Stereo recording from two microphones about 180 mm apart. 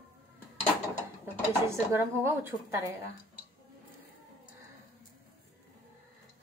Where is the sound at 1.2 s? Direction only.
15° right (ahead or behind).